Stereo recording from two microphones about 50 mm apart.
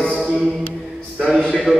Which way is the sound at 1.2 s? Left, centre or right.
Centre.